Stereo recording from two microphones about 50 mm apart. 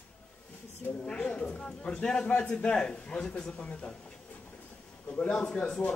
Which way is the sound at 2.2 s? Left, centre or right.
Left.